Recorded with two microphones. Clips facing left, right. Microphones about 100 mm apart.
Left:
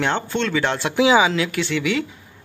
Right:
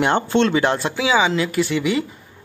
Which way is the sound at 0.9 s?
20° left (ahead or behind).